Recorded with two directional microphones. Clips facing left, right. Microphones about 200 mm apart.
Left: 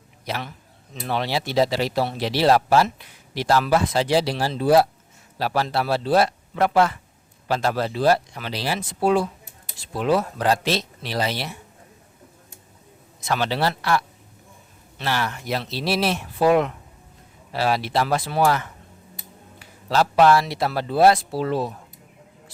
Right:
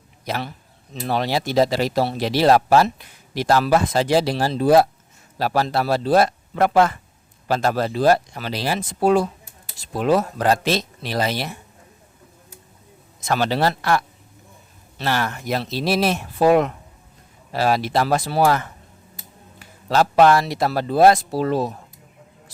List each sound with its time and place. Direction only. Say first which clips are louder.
0.3 s a man's voice: right 3 dB; 40° right (ahead or behind)
13.1 s speech: right 3 dB; 45° right (ahead or behind)